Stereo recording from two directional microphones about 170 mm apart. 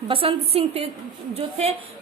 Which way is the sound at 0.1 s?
35° right (ahead or behind).